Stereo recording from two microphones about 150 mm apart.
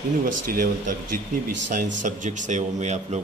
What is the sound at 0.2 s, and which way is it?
Speech, 70° right (ahead or behind).